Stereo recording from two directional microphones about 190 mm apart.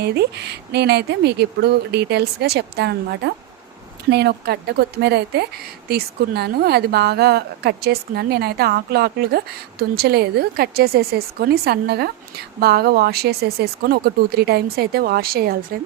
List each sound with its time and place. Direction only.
0.0 s a woman's voice: 60° right (ahead or behind)